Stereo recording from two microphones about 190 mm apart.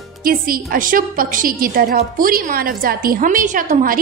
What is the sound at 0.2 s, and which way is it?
A woman's voice, 50° right (ahead or behind).